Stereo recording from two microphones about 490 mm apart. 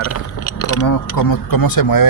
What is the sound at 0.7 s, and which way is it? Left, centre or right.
Speech, left.